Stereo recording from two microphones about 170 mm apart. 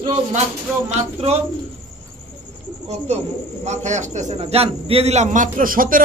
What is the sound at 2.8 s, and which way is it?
A man's voice, 40° right (ahead or behind).